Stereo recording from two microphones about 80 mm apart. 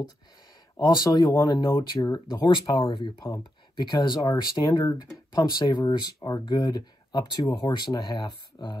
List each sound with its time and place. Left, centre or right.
0.7 s speech: left
1.4 s speech: left
2.1 s speech: left
2.7 s speech: left
3.7 s speech: left